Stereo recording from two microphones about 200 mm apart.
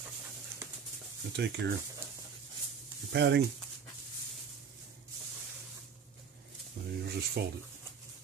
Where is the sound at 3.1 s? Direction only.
55° right (ahead or behind).